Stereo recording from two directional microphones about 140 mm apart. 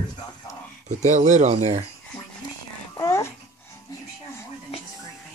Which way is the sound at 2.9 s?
20° left (ahead or behind).